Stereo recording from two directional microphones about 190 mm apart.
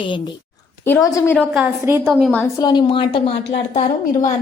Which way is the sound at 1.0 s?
10° left (ahead or behind).